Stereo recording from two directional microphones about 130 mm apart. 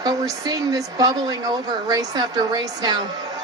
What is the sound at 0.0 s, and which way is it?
A man's voice, 30° right (ahead or behind).